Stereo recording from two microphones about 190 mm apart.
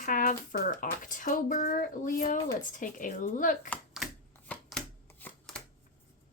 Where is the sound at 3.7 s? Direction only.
5° left (ahead or behind).